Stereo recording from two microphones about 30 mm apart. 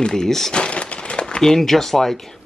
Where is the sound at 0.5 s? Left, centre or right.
Left.